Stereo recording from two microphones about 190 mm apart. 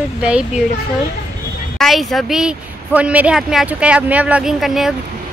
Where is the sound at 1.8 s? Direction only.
Centre (ahead or behind).